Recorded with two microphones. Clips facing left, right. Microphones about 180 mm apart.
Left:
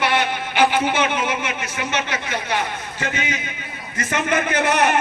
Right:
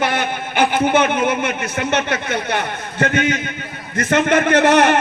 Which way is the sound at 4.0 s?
75° right (ahead or behind).